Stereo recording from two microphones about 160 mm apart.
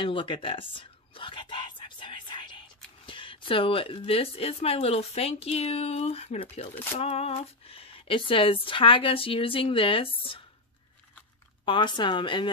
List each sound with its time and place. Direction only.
0.0 s whispering: 30° left (ahead or behind)
3.1 s a woman's voice: 30° left (ahead or behind)
11.6 s a woman's voice: 30° left (ahead or behind)